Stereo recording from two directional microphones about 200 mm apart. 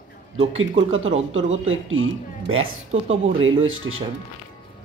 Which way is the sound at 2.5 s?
30° right (ahead or behind).